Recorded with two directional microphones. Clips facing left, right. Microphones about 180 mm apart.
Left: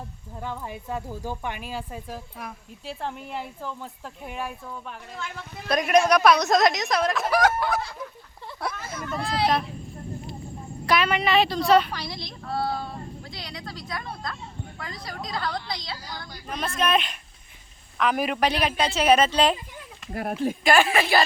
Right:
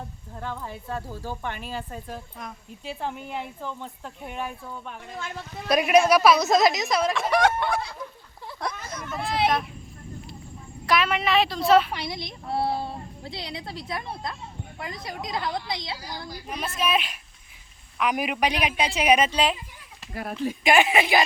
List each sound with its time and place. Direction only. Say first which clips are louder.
0.3 s speech: left 1 dB; 10° left (ahead or behind)
8.6 s a sound: left 1 dB; 5° left (ahead or behind)
10.8 s a woman's voice: left 1 dB; centre (ahead or behind)
11.9 s a woman's voice: right 2 dB; 25° right (ahead or behind)
16.5 s a man's voice: left 2 dB; 5° right (ahead or behind)
20.1 s speech: left 3 dB; 55° left (ahead or behind)
20.7 s a man's voice: even; 20° right (ahead or behind)